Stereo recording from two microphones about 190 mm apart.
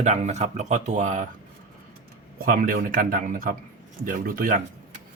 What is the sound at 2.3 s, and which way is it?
A man's voice, 50° right (ahead or behind).